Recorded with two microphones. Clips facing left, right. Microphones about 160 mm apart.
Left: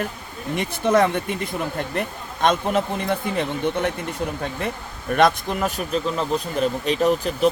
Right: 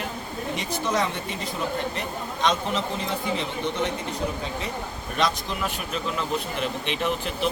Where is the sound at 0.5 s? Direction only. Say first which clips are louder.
Left 8 dB; 55° left (ahead or behind).